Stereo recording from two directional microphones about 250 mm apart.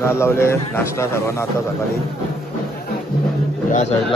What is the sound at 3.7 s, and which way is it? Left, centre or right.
Speech, left.